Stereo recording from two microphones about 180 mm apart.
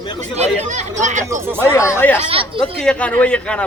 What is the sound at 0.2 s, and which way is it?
Speech, 40° right (ahead or behind).